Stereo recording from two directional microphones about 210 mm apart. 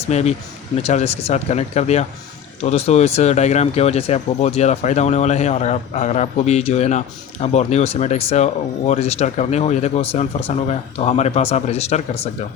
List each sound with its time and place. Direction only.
0.0 s speech: 30° left (ahead or behind)